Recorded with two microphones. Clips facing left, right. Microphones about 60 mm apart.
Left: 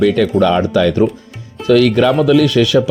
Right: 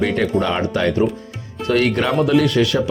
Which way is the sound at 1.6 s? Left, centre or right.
Left.